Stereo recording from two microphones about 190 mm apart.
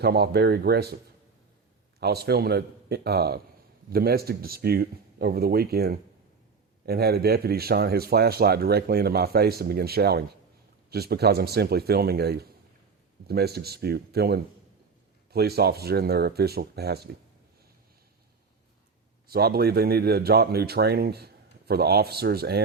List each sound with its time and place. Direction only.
0.0 s speech: 55° right (ahead or behind)
2.0 s speech: 55° right (ahead or behind)
19.3 s speech: 55° right (ahead or behind)